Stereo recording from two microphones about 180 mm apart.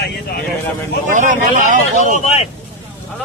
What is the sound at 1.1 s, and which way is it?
Speech, 45° right (ahead or behind).